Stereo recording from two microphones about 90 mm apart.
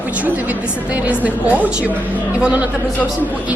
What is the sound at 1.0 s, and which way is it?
A woman's voice, 15° right (ahead or behind).